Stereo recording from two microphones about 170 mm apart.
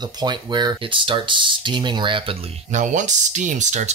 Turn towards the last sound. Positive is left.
turn(degrees=-45)  # may be behind; listen again after turning